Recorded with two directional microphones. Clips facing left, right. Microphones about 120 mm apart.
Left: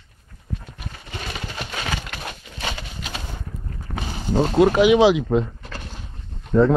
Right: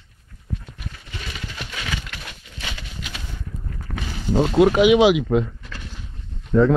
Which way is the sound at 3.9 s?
30° left (ahead or behind).